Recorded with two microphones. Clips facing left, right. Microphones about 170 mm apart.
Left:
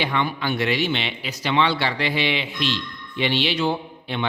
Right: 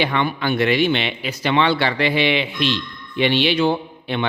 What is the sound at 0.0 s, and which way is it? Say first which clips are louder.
Speech: right 3 dB; 65° right (ahead or behind).